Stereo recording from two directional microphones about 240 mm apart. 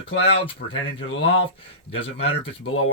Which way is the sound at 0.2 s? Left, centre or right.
Left.